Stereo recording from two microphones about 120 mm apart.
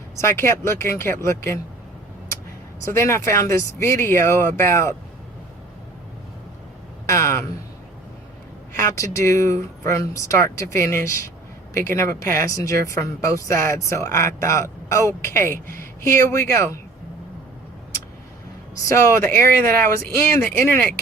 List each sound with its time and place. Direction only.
0.2 s a woman's voice: 25° left (ahead or behind)
2.8 s a woman's voice: 25° left (ahead or behind)
7.1 s a sound: 25° left (ahead or behind)
8.7 s a woman's voice: 25° left (ahead or behind)
18.9 s a woman's voice: 25° left (ahead or behind)